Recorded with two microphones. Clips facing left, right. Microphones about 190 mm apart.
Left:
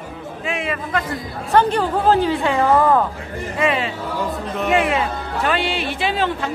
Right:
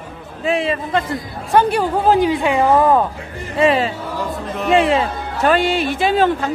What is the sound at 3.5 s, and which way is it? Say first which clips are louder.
A man's voice: right 5 dB; 35° right (ahead or behind).